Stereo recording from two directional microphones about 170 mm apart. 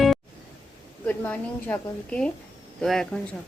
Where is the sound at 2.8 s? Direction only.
5° left (ahead or behind).